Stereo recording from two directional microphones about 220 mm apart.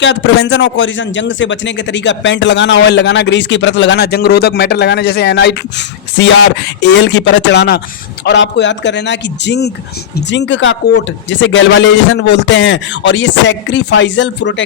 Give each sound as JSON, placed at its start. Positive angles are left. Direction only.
{"t": 0.0, "sound": "a man's voice", "side_deg": 55}